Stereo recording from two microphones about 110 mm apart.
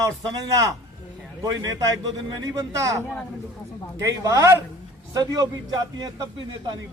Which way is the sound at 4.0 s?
30° right (ahead or behind).